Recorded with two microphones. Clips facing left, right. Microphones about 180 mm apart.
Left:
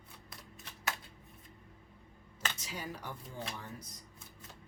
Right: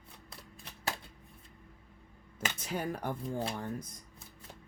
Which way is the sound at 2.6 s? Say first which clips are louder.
Right 8 dB; 55° right (ahead or behind).